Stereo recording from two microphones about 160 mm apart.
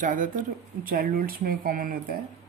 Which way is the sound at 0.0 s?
55° right (ahead or behind).